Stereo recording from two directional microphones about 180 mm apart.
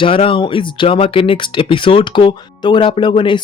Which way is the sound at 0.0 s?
30° left (ahead or behind).